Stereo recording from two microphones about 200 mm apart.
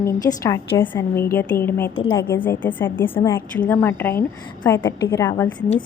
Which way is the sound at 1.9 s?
25° left (ahead or behind).